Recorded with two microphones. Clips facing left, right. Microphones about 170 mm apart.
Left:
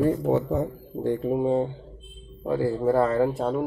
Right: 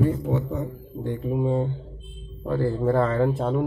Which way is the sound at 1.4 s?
20° left (ahead or behind).